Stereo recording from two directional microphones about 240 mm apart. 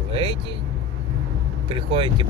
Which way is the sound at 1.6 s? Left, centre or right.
Right.